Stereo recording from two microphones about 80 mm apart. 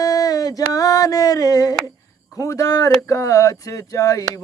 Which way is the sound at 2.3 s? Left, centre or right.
Left.